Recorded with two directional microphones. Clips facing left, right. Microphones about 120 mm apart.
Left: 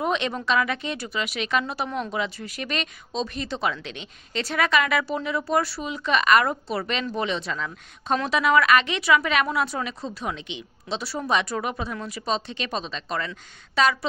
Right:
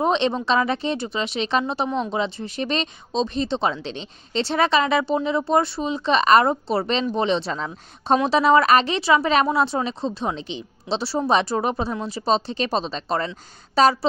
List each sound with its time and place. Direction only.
0.0 s a woman's voice: 30° right (ahead or behind)